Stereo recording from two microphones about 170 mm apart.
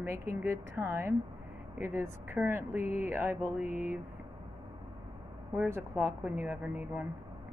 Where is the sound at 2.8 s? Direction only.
45° left (ahead or behind).